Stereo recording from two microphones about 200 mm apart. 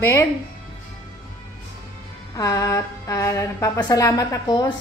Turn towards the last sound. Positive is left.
turn(degrees=20)  # may be behind; listen again after turning